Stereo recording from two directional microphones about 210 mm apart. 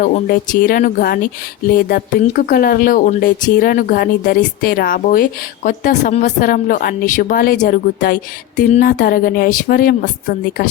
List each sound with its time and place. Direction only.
0.0 s speech: 40° left (ahead or behind)